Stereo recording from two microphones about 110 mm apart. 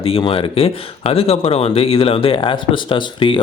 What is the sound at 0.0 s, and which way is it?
Speech, 60° left (ahead or behind).